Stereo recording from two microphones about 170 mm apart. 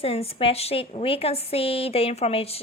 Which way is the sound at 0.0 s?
35° left (ahead or behind).